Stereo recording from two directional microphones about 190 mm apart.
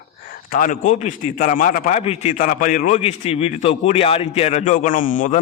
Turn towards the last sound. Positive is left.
turn(degrees=40)  # may be behind; listen again after turning